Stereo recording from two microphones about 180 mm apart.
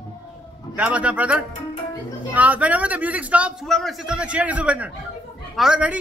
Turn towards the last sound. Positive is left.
turn(degrees=-5)  # may be behind; listen again after turning